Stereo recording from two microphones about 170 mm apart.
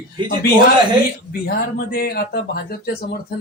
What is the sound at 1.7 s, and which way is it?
Speech, 60° left (ahead or behind).